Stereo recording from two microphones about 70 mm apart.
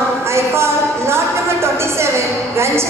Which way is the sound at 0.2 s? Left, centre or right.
Right.